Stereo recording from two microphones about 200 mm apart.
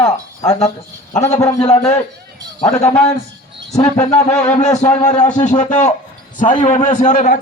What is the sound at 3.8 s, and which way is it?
Speech, 15° left (ahead or behind).